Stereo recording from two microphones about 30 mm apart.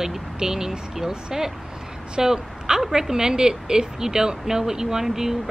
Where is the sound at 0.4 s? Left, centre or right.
Centre.